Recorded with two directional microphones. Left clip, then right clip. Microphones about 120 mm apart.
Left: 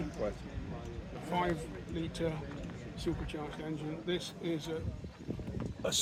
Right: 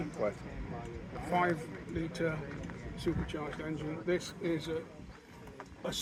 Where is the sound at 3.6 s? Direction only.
25° left (ahead or behind).